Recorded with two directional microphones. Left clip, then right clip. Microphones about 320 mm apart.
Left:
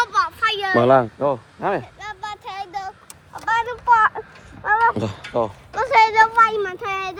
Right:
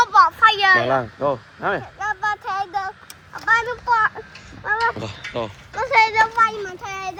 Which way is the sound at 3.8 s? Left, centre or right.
Left.